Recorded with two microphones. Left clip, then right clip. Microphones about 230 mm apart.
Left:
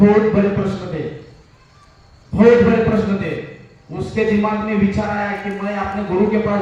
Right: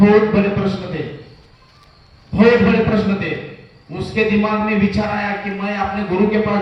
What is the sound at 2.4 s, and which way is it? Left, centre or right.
A man's voice, right.